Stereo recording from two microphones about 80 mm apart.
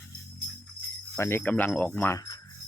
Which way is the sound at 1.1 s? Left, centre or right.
Left.